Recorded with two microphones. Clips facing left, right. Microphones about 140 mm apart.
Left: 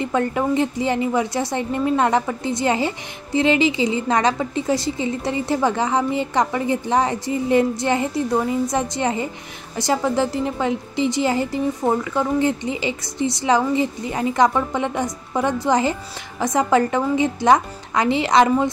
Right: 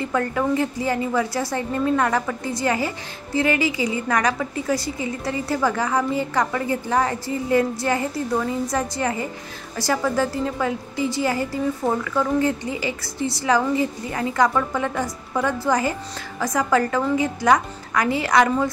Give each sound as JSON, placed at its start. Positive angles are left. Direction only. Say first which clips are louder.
{"t": 0.0, "sound": "a woman's voice", "louder": "left 2 dB", "side_deg": 20}